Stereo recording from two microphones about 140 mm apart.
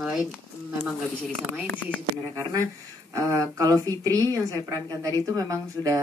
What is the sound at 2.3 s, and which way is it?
A woman's voice, 25° right (ahead or behind).